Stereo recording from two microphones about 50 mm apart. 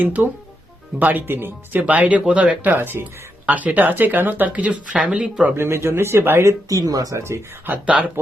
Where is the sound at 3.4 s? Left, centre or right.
Right.